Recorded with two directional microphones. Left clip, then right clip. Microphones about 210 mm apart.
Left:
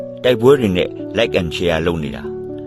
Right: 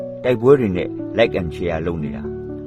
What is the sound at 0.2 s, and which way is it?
Speech, 15° left (ahead or behind).